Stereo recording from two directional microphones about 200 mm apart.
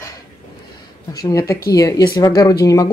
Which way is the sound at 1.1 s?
20° left (ahead or behind).